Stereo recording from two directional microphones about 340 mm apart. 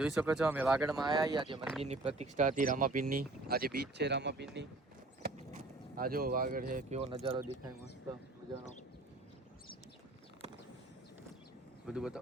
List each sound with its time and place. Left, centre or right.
0.0 s speech: centre
1.0 s speech: centre
11.9 s speech: centre